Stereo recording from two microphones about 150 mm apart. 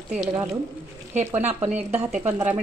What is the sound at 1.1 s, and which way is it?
Speech, 50° right (ahead or behind).